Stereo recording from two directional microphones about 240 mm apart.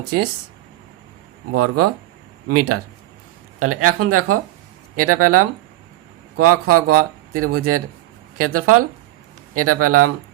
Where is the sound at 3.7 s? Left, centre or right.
Right.